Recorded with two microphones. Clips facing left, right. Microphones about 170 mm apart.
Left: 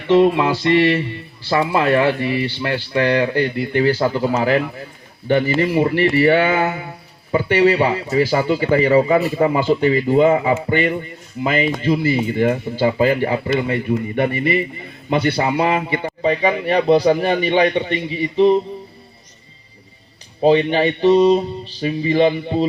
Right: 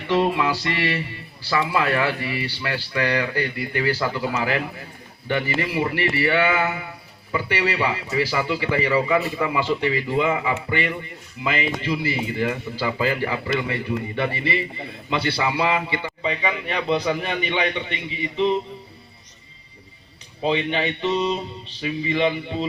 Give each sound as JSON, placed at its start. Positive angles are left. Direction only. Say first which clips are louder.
{"t": 0.1, "sound": "speech", "louder": "left 7 dB", "side_deg": 25}
{"t": 5.6, "sound": "a man's voice", "louder": "left 7 dB", "side_deg": 45}
{"t": 7.8, "sound": "a man's voice", "louder": "left 6 dB", "side_deg": 40}
{"t": 9.0, "sound": "a man's voice", "louder": "left 6 dB", "side_deg": 40}
{"t": 9.6, "sound": "speech", "louder": "left 7 dB", "side_deg": 25}
{"t": 14.2, "sound": "a man's voice", "louder": "left 7 dB", "side_deg": 50}
{"t": 20.4, "sound": "a man's voice", "louder": "left 8 dB", "side_deg": 35}